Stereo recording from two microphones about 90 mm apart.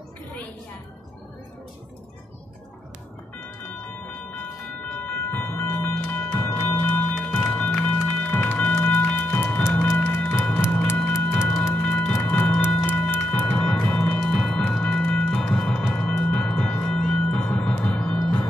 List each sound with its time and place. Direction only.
4.9 s music: 20° left (ahead or behind)
11.7 s music: 15° left (ahead or behind)